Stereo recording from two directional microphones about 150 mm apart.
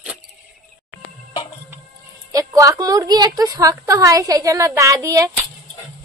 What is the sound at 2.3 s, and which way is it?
A woman's voice, 25° right (ahead or behind).